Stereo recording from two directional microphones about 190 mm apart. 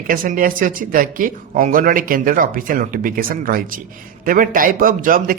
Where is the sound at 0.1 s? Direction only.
50° right (ahead or behind).